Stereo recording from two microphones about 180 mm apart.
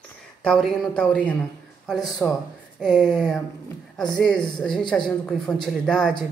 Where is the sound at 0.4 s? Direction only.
5° left (ahead or behind).